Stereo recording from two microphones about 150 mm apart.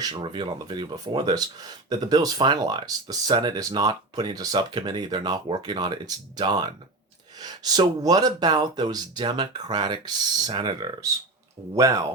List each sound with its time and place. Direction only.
0.0 s speech: 30° right (ahead or behind)